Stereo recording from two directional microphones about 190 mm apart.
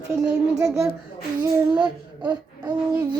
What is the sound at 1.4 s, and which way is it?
Child singing, 20° right (ahead or behind).